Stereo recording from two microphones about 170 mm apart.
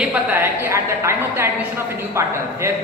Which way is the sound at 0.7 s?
15° right (ahead or behind).